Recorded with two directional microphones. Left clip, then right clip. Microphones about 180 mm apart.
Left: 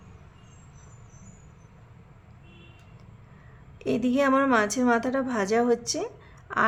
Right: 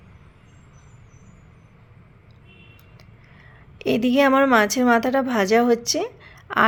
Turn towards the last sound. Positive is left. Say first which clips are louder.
# right 6 dB
turn(degrees=-25)  # may be behind; listen again after turning